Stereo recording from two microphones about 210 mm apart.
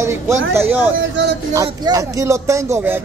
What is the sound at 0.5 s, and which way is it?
Speech, 10° right (ahead or behind).